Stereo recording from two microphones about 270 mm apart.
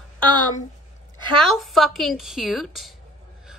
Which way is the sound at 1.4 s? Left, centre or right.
Centre.